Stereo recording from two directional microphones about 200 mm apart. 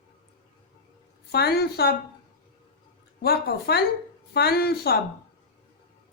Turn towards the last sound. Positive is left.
turn(degrees=50)  # may be behind; listen again after turning